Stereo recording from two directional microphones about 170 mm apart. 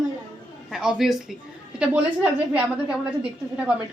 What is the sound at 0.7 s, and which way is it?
Speech, centre (ahead or behind).